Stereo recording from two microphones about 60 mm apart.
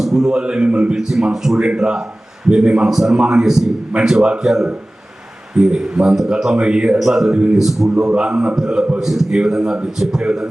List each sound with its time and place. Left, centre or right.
0.0 s speech: centre